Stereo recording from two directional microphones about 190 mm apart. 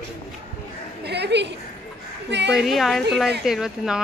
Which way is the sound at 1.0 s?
60° right (ahead or behind).